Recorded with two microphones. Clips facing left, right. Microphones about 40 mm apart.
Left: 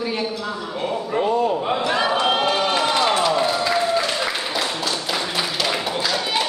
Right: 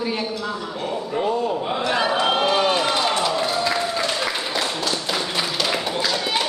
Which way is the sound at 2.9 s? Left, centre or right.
Centre.